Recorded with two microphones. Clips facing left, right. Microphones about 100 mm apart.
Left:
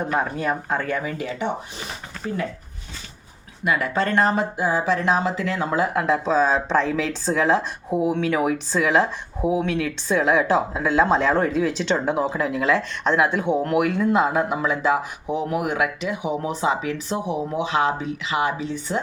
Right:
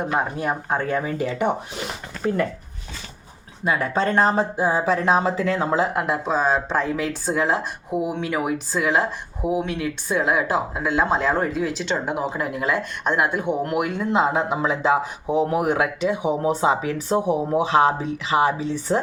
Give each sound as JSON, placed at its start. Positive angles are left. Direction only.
{"t": 0.1, "sound": "speech", "side_deg": -15}
{"t": 2.2, "sound": "speech", "side_deg": -55}
{"t": 3.6, "sound": "speech", "side_deg": -30}